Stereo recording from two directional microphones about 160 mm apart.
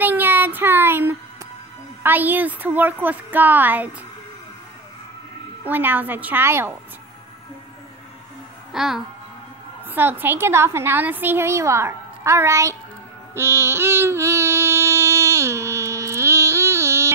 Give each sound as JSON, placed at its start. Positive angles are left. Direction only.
{"t": 0.0, "sound": "child singing", "side_deg": -10}
{"t": 2.0, "sound": "a woman's voice", "side_deg": -10}
{"t": 5.7, "sound": "a woman's voice", "side_deg": -10}
{"t": 8.7, "sound": "a child's voice", "side_deg": 0}
{"t": 13.3, "sound": "a sound", "side_deg": -15}